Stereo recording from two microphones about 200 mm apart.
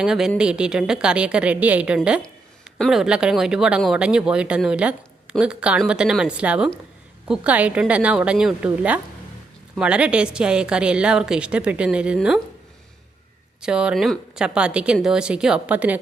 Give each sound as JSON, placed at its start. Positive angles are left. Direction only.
{"t": 0.0, "sound": "a woman's voice", "side_deg": -5}
{"t": 13.6, "sound": "a woman's voice", "side_deg": -5}